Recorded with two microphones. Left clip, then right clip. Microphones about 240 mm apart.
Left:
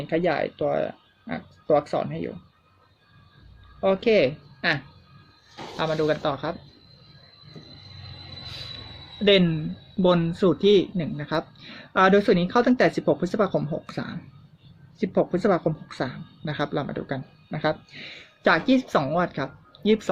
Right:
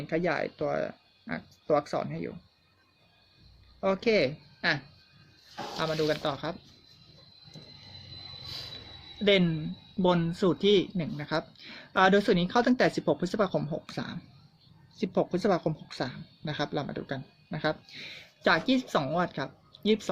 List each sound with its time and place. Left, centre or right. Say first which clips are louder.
0.1 s speech: left 5 dB; centre
3.8 s speech: left 6 dB; centre
9.2 s speech: left 5 dB; centre